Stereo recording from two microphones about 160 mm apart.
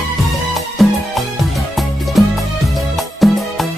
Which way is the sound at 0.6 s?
Centre (ahead or behind).